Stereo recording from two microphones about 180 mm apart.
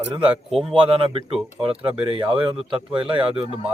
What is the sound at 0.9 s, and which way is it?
Speech, 30° right (ahead or behind).